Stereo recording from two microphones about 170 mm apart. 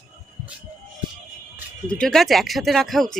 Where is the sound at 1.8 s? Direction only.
5° left (ahead or behind).